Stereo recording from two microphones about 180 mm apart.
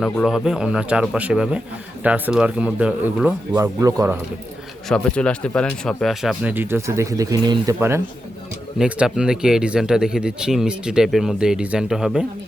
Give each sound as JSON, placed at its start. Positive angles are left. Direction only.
{"t": 0.0, "sound": "speech", "side_deg": 0}
{"t": 3.5, "sound": "speech", "side_deg": -20}
{"t": 4.9, "sound": "speech", "side_deg": 5}